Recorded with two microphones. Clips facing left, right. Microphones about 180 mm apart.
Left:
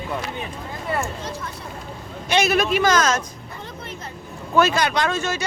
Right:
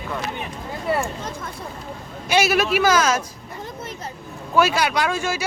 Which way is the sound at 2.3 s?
5° right (ahead or behind).